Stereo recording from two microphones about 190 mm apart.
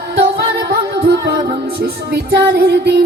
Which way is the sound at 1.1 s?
60° right (ahead or behind).